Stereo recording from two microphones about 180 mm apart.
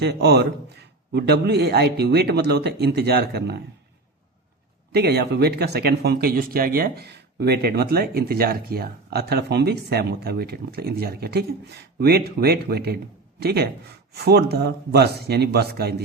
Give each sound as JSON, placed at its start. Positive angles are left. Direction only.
{"t": 0.0, "sound": "speech", "side_deg": -65}
{"t": 4.9, "sound": "speech", "side_deg": -65}